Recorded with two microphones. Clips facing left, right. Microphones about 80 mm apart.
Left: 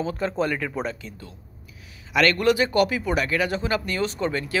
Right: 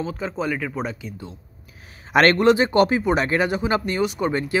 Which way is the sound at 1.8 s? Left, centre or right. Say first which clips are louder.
Right 5 dB; right.